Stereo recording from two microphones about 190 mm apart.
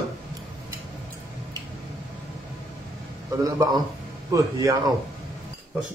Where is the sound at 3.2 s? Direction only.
20° right (ahead or behind).